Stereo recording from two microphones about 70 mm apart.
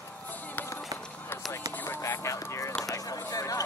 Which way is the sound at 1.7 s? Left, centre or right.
Left.